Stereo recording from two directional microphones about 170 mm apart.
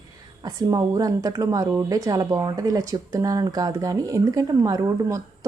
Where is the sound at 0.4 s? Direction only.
25° right (ahead or behind).